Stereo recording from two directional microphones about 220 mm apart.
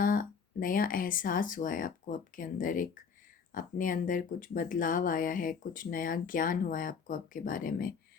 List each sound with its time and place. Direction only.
0.0 s speech: 40° left (ahead or behind)